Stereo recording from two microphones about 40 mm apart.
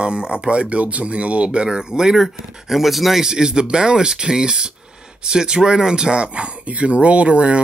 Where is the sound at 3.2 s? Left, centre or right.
Centre.